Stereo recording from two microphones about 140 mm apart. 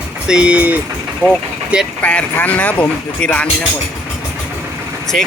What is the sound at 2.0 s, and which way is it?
Speech, 10° left (ahead or behind).